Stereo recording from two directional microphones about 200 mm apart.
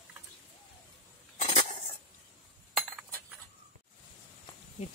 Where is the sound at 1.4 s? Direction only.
40° left (ahead or behind).